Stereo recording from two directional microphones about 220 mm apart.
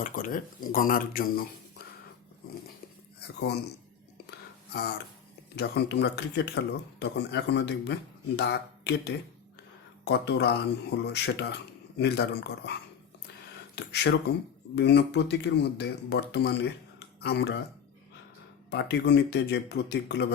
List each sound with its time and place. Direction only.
0.0 s speech: 40° left (ahead or behind)
3.2 s speech: 45° left (ahead or behind)
4.3 s whispering: 50° left (ahead or behind)
5.5 s speech: 50° left (ahead or behind)
13.7 s speech: 50° left (ahead or behind)
18.7 s speech: 50° left (ahead or behind)